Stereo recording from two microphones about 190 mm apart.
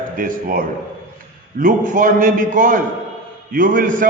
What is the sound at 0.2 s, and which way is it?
A man's voice, 50° right (ahead or behind).